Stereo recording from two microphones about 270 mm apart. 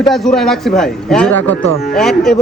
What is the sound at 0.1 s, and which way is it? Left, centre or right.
A man's voice, centre.